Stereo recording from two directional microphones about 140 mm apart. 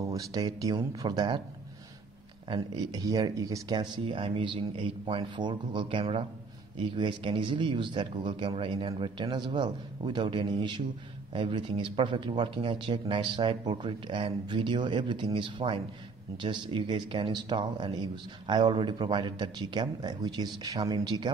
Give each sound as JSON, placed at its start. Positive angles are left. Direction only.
{"t": 0.0, "sound": "speech", "side_deg": -25}
{"t": 2.4, "sound": "speech", "side_deg": -30}